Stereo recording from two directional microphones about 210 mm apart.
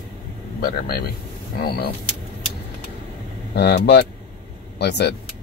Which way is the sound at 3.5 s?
50° left (ahead or behind).